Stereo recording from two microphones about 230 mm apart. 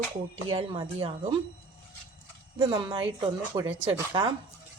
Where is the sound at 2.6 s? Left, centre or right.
Centre.